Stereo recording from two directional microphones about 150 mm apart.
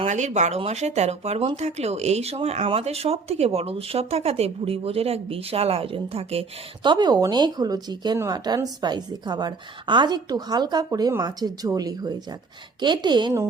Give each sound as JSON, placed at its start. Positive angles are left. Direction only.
{"t": 0.0, "sound": "speech", "side_deg": -50}
{"t": 6.8, "sound": "speech", "side_deg": -30}